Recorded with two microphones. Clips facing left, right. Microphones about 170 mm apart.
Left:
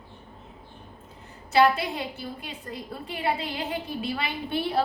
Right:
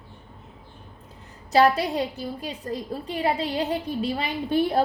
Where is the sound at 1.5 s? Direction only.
40° right (ahead or behind).